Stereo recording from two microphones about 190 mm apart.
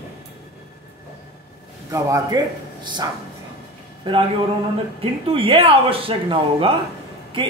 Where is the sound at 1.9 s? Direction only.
15° right (ahead or behind).